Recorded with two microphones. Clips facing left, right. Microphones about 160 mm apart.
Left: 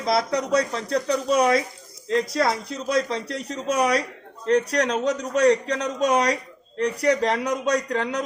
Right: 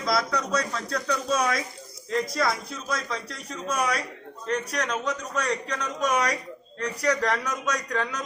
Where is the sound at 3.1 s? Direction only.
30° left (ahead or behind).